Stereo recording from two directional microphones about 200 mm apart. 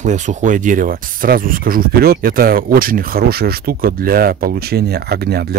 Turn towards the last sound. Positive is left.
turn(degrees=-50)  # may be behind; listen again after turning